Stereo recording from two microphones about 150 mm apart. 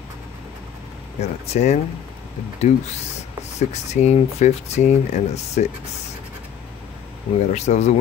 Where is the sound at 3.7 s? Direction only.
50° left (ahead or behind).